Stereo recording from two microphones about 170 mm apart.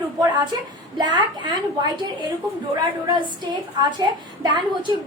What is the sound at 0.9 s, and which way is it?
A woman's voice, 25° right (ahead or behind).